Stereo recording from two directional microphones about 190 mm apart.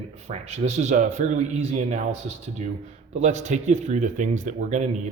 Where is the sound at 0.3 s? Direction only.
35° right (ahead or behind).